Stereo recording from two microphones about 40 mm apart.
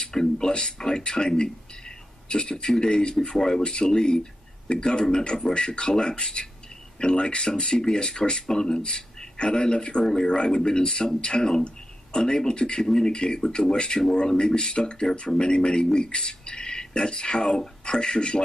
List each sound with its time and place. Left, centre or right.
0.0 s speech: centre